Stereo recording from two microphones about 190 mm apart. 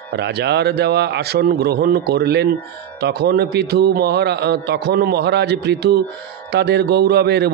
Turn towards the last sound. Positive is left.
turn(degrees=-60)  # may be behind; listen again after turning